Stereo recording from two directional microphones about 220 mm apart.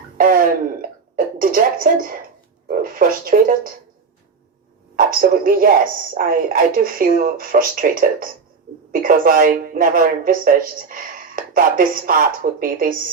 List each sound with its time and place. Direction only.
0.2 s a sound: 40° right (ahead or behind)
2.6 s speech: 40° right (ahead or behind)
4.9 s speech: 40° right (ahead or behind)